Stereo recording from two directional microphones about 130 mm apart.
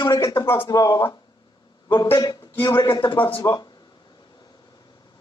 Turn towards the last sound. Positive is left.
turn(degrees=30)  # may be behind; listen again after turning